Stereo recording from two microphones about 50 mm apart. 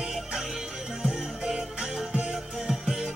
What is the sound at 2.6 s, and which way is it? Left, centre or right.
Music, centre.